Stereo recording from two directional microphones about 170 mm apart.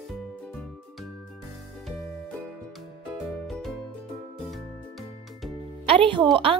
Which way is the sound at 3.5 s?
Centre (ahead or behind).